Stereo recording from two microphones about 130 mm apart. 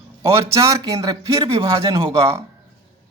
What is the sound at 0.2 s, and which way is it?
Speech, 20° right (ahead or behind).